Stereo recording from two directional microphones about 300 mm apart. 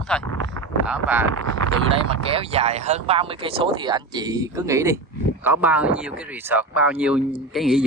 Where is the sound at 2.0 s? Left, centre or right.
Centre.